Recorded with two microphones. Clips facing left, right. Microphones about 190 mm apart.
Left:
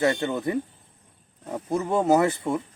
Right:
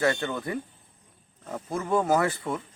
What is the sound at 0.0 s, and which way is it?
A man's voice, 25° left (ahead or behind).